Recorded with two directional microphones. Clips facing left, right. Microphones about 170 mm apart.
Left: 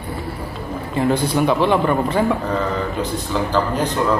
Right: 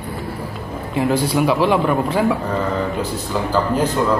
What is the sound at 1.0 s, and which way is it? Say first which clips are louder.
A man's voice: even; 5° right (ahead or behind).